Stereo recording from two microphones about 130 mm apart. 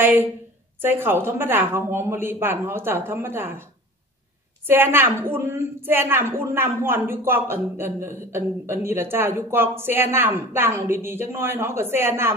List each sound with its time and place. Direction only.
0.0 s a woman's voice: 15° right (ahead or behind)
4.6 s a woman's voice: 15° right (ahead or behind)